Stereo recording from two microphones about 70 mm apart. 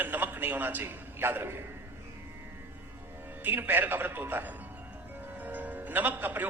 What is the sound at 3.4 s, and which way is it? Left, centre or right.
A man's voice, right.